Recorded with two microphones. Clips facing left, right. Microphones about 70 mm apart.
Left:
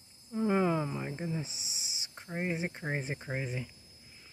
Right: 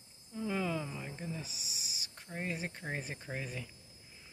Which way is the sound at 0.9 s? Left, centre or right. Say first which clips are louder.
Left 6 dB; left.